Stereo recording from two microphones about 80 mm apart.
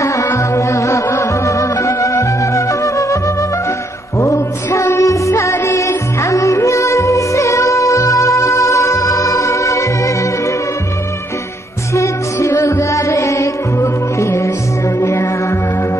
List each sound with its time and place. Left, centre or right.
0.0 s music: left
4.2 s music: left
11.9 s music: left